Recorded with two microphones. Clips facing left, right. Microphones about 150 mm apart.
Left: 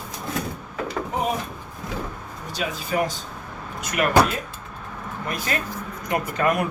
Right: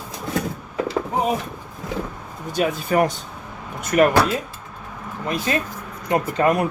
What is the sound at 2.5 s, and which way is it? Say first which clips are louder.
Speech: right 6 dB; 55° right (ahead or behind).